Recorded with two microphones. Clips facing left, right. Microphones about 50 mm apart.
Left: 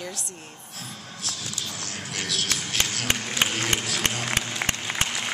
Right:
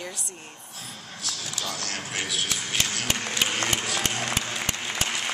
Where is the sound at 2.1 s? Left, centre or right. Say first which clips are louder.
Left 2 dB; centre.